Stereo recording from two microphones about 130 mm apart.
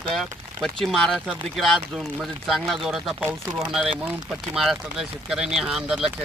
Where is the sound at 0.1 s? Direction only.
Centre (ahead or behind).